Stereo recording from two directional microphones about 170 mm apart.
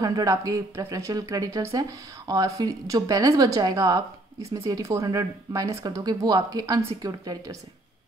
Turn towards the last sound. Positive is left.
turn(degrees=-20)  # may be behind; listen again after turning